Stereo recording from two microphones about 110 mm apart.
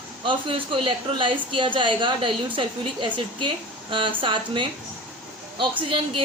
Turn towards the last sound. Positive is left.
turn(degrees=-50)  # may be behind; listen again after turning